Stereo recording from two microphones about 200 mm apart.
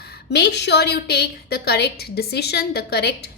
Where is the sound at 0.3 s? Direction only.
55° left (ahead or behind).